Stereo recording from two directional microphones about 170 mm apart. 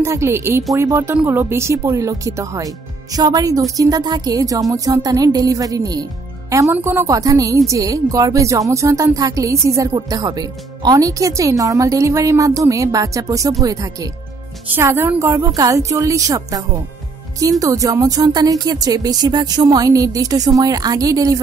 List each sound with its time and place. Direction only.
0.0 s a woman's voice: 15° right (ahead or behind)